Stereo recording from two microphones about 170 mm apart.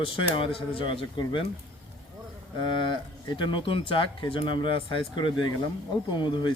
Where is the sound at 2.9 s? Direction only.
25° left (ahead or behind).